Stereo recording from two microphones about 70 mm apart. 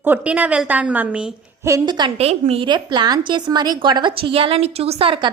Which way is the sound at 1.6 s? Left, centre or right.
Right.